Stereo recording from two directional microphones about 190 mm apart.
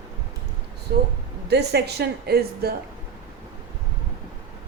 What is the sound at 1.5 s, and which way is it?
A woman's voice, 60° right (ahead or behind).